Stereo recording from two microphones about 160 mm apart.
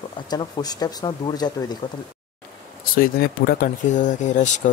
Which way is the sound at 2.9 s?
65° left (ahead or behind).